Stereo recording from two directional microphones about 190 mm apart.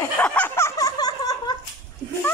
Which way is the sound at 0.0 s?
5° left (ahead or behind).